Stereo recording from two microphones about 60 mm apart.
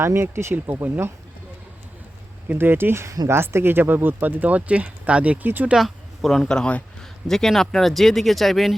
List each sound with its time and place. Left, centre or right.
0.0 s speech: right
2.5 s speech: right
5.7 s speech: centre